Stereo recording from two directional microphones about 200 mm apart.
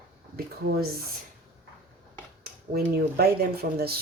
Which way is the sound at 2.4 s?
50° right (ahead or behind).